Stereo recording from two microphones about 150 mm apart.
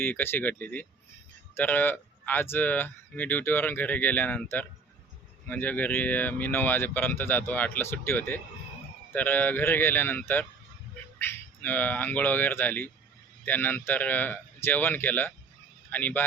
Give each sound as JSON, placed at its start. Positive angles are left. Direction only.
{"t": 0.0, "sound": "speech", "side_deg": 15}